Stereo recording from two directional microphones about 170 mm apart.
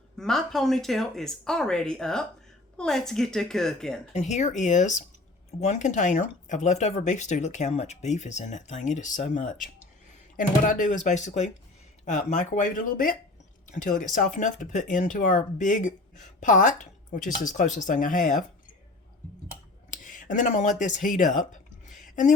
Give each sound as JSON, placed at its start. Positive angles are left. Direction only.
{"t": 0.2, "sound": "speech", "side_deg": 0}
{"t": 4.1, "sound": "speech", "side_deg": 40}
{"t": 20.1, "sound": "speech", "side_deg": 50}
{"t": 21.8, "sound": "a sound", "side_deg": 50}